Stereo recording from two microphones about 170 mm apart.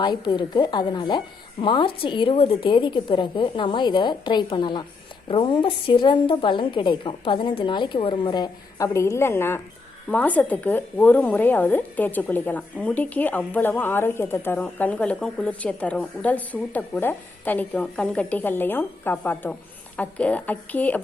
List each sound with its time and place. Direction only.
0.0 s a woman's voice: 25° left (ahead or behind); by 21.0 s 10° left (ahead or behind)